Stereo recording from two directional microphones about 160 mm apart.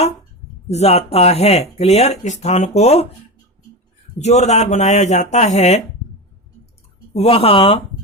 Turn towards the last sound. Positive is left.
turn(degrees=35)  # may be behind; listen again after turning